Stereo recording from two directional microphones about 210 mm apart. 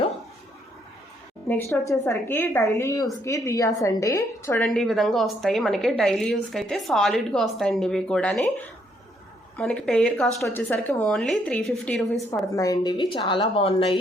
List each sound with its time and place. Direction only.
1.5 s a woman's voice: 10° left (ahead or behind)
4.5 s a woman's voice: 5° left (ahead or behind)
9.6 s a woman's voice: centre (ahead or behind)
12.5 s speech: 15° left (ahead or behind)